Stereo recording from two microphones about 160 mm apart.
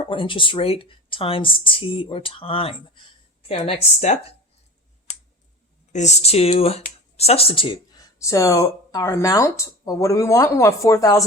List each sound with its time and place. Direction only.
0.0 s speech: 35° left (ahead or behind)
5.9 s speech: 45° left (ahead or behind)
8.2 s speech: 20° left (ahead or behind)